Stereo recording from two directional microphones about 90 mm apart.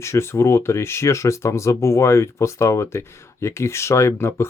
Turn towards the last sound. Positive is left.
turn(degrees=30)  # may be behind; listen again after turning